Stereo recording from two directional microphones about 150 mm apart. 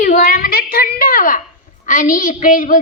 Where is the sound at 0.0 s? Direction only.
65° left (ahead or behind).